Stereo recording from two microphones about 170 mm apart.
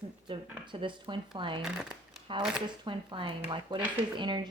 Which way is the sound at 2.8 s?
30° right (ahead or behind).